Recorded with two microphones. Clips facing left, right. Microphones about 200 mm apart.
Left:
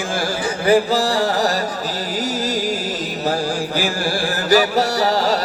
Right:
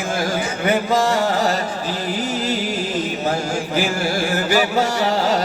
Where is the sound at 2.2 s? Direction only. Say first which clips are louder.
Left 2 dB; 40° left (ahead or behind).